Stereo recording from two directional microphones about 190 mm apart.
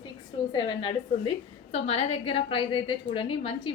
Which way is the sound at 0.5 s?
25° left (ahead or behind).